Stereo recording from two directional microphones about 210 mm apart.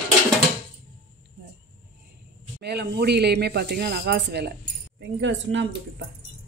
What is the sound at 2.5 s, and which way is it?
Speech, 50° right (ahead or behind).